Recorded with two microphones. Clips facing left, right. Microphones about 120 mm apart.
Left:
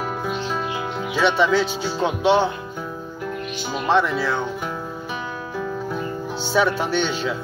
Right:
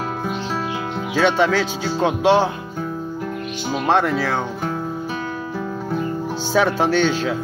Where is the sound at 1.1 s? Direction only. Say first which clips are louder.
Right 1 dB; 90° right.